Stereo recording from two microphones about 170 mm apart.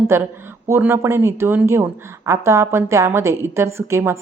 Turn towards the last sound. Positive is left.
turn(degrees=-15)  # may be behind; listen again after turning